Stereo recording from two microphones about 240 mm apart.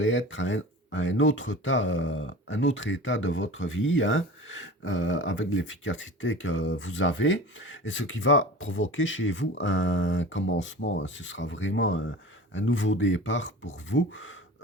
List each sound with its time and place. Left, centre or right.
0.0 s speech: left